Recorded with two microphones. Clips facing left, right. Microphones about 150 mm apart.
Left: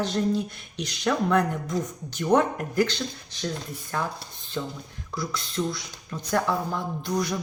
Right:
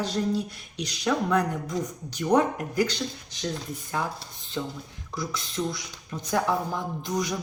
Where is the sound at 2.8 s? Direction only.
15° right (ahead or behind).